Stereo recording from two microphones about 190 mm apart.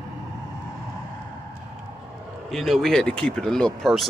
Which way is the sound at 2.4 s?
Centre (ahead or behind).